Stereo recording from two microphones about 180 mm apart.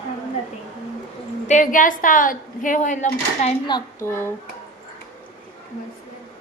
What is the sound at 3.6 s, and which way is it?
Speech, 20° left (ahead or behind).